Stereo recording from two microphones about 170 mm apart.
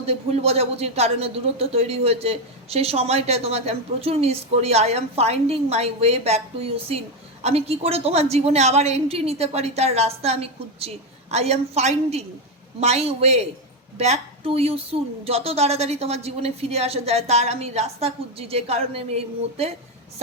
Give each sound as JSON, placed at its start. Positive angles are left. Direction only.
{"t": 0.0, "sound": "a man's voice", "side_deg": -35}